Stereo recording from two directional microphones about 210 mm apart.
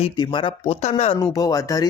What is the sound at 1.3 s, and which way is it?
Speech, 15° left (ahead or behind).